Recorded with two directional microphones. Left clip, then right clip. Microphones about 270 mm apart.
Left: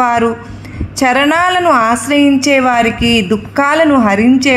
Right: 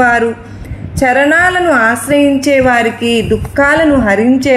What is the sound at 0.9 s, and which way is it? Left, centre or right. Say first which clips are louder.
A woman's voice: right 2 dB; left.